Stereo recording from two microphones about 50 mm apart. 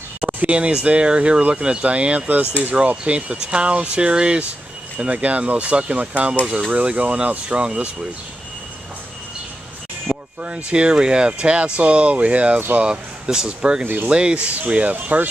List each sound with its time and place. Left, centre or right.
0.2 s speech: right
10.0 s speech: right
13.8 s speech: right
14.1 s speech: right